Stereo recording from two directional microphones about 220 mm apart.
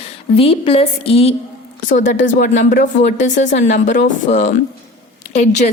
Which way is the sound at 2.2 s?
55° left (ahead or behind).